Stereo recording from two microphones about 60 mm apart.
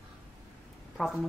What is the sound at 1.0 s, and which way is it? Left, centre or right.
Speech, centre.